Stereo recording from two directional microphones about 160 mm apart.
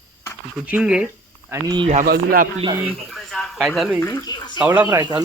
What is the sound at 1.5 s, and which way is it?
Speech, 30° right (ahead or behind).